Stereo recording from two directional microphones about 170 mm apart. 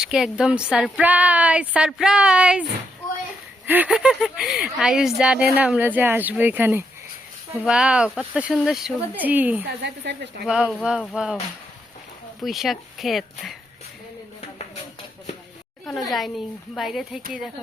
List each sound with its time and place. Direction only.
0.0 s speech: 5° right (ahead or behind)
3.7 s speech: 10° right (ahead or behind)
9.6 s a woman's voice: 85° right
10.4 s speech: 5° right (ahead or behind)
12.4 s speech: centre (ahead or behind)
15.9 s speech: centre (ahead or behind)